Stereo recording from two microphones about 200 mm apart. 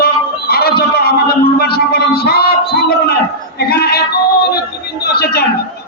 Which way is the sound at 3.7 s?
50° left (ahead or behind).